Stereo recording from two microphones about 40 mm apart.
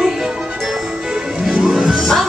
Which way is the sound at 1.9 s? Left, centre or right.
Centre.